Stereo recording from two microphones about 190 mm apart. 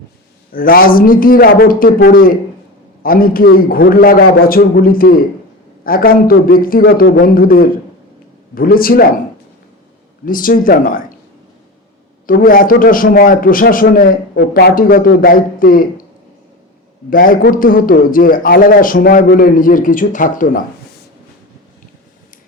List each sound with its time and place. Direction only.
0.5 s a man's voice: 50° left (ahead or behind)
10.2 s a man's voice: 45° left (ahead or behind)
12.2 s a man's voice: 50° left (ahead or behind)
17.1 s a man's voice: 50° left (ahead or behind)